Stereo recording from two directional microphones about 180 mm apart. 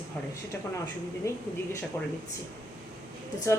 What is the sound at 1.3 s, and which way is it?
Speech, 15° left (ahead or behind).